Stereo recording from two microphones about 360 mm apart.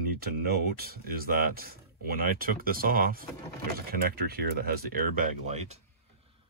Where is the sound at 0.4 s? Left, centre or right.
Right.